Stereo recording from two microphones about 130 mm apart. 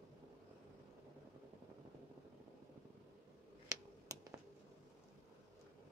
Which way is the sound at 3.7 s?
25° right (ahead or behind).